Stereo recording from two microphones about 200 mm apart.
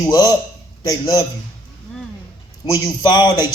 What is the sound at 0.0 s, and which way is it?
Speech, 20° left (ahead or behind).